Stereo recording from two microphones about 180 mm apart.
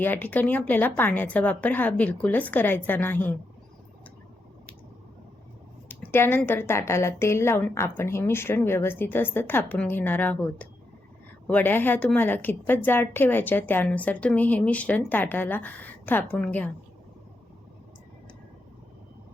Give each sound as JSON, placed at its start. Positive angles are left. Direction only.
{"t": 0.0, "sound": "a woman's voice", "side_deg": 10}
{"t": 5.9, "sound": "a woman's voice", "side_deg": 10}